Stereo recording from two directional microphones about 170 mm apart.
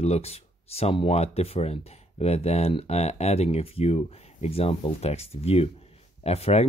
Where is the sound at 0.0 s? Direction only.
35° left (ahead or behind).